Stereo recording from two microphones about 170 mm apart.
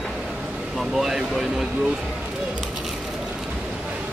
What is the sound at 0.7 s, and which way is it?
Speech, centre (ahead or behind).